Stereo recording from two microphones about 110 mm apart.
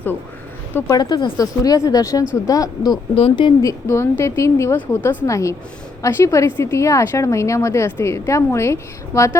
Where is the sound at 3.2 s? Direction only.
50° left (ahead or behind).